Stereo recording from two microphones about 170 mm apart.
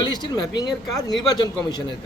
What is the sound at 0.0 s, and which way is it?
Speech, 25° left (ahead or behind).